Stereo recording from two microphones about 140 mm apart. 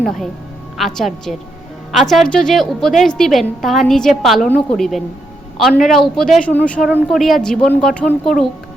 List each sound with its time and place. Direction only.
0.0 s a woman's voice: centre (ahead or behind)